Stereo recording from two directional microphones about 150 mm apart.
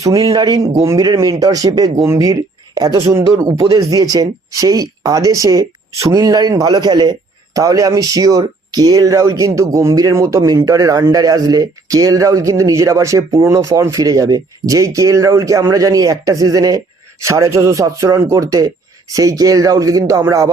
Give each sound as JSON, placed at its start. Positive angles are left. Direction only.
{"t": 0.0, "sound": "speech", "side_deg": -20}